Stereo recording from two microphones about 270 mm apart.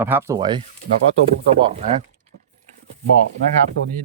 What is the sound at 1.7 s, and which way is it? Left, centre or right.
Speech, right.